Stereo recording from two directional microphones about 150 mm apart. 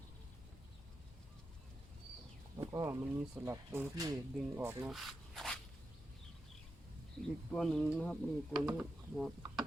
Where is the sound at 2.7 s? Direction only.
15° right (ahead or behind).